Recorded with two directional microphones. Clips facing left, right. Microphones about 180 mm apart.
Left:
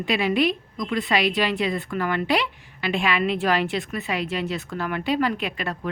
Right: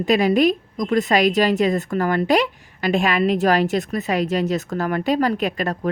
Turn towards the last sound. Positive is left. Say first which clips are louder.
# right 6 dB
turn(degrees=-40)  # may be behind; listen again after turning